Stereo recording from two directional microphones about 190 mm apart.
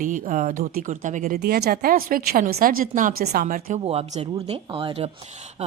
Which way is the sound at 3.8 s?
30° right (ahead or behind).